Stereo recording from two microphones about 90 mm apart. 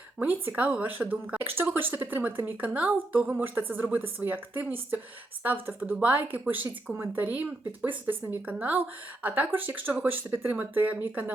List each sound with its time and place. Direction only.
0.2 s a woman's voice: 20° right (ahead or behind)